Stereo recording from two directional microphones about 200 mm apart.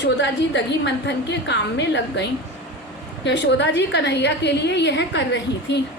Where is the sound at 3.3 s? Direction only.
60° left (ahead or behind).